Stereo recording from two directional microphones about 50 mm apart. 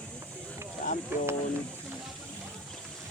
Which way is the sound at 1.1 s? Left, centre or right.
Right.